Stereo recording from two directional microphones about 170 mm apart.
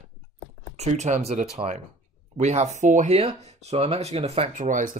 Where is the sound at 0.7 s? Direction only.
40° right (ahead or behind).